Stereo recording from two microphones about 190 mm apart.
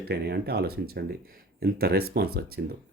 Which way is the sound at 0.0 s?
55° right (ahead or behind).